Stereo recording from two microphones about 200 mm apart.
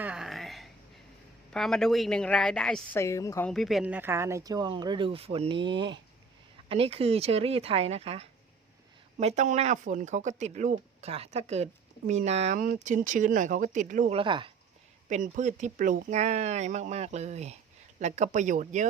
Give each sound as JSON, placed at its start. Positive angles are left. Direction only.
{"t": 0.0, "sound": "a sound", "side_deg": -5}
{"t": 1.5, "sound": "a woman's voice", "side_deg": 0}
{"t": 3.0, "sound": "a woman's voice", "side_deg": 15}
{"t": 3.5, "sound": "speech", "side_deg": 0}
{"t": 14.2, "sound": "speech", "side_deg": -25}
{"t": 15.1, "sound": "speech", "side_deg": -35}